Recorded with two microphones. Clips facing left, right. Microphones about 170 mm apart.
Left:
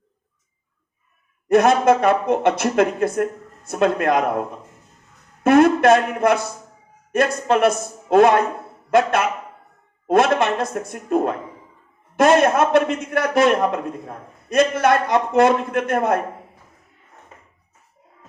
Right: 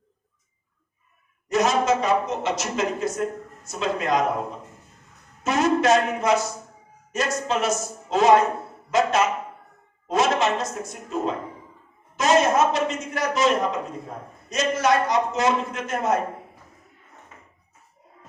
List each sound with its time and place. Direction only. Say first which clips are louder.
1.5 s a man's voice: left 6 dB; 55° left (ahead or behind)